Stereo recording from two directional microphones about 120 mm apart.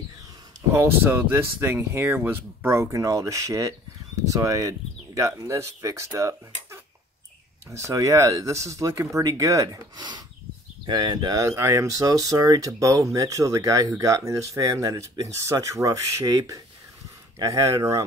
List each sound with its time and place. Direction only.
0.7 s speech: 15° right (ahead or behind)